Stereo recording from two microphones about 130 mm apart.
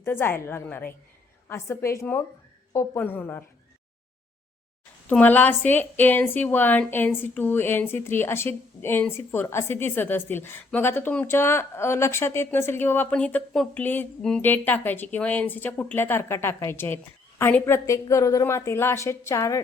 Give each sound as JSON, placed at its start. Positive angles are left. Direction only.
{"t": 0.0, "sound": "a woman's voice", "side_deg": 20}
{"t": 5.0, "sound": "a woman's voice", "side_deg": 15}